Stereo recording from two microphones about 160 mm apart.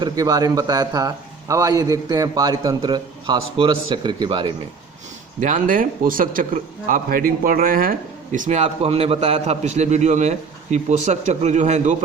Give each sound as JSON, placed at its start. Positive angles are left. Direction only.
{"t": 0.0, "sound": "a man's voice", "side_deg": -25}
{"t": 5.4, "sound": "a man's voice", "side_deg": -55}